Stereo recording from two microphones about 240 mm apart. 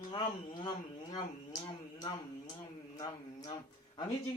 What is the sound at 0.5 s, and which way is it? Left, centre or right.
Speech, centre.